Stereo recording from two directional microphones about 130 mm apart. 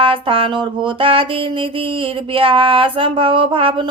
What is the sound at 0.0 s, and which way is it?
Speech, 45° right (ahead or behind).